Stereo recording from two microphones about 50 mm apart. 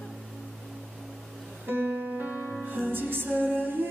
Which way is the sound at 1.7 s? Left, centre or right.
Right.